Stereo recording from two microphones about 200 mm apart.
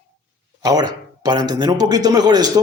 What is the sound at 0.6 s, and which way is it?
Speech, 20° right (ahead or behind).